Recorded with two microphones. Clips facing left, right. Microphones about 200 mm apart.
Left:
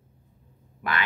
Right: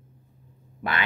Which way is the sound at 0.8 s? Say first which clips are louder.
Even; 25° right (ahead or behind).